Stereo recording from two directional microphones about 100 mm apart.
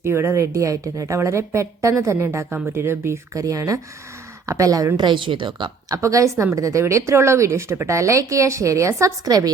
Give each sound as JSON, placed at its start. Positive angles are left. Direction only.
{"t": 0.0, "sound": "a woman's voice", "side_deg": -25}
{"t": 4.9, "sound": "speech", "side_deg": -55}
{"t": 5.9, "sound": "a woman's voice", "side_deg": -35}